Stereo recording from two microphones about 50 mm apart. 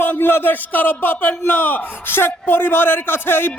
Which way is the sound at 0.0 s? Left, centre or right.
Left.